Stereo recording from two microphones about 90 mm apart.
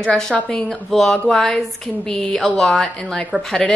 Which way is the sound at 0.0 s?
10° left (ahead or behind).